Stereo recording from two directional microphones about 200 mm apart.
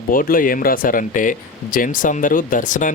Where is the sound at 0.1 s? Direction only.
45° left (ahead or behind).